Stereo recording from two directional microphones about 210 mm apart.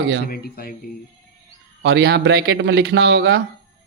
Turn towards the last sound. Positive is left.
turn(degrees=-55)  # may be behind; listen again after turning